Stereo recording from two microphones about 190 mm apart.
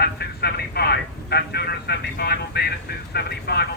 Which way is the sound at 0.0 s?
55° left (ahead or behind).